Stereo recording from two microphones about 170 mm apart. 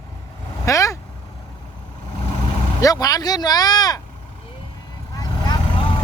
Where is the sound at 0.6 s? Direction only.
20° left (ahead or behind).